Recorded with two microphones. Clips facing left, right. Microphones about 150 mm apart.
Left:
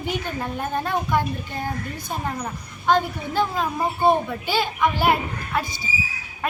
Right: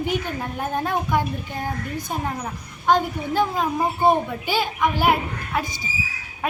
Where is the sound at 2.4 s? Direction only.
10° right (ahead or behind).